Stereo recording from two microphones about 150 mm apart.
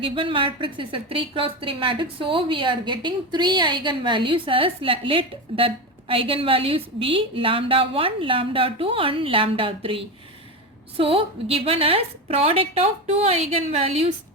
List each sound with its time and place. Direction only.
0.0 s a woman's voice: 35° right (ahead or behind)